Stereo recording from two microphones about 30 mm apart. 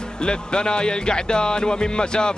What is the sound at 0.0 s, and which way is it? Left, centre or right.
Speech, left.